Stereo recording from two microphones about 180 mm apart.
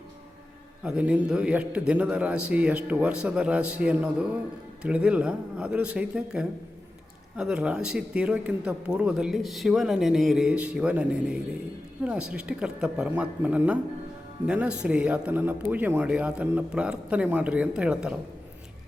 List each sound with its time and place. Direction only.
0.9 s speech: 5° right (ahead or behind)